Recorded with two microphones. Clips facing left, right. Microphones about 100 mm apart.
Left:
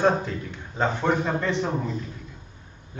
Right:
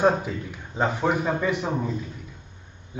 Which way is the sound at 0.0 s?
10° right (ahead or behind).